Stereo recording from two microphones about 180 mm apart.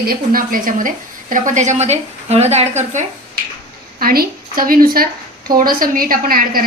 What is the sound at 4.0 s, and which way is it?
A woman's voice, 55° right (ahead or behind).